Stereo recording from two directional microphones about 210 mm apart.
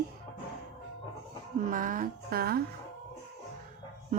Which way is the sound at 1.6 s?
40° right (ahead or behind).